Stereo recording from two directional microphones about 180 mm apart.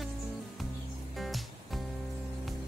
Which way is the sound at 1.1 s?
Centre (ahead or behind).